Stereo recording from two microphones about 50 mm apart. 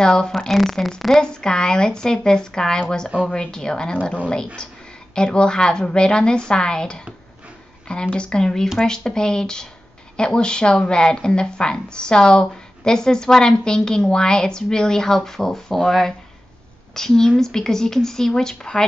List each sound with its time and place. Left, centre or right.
0.0 s speech: centre
0.4 s a woman's voice: centre
1.2 s speech: centre
16.9 s speech: centre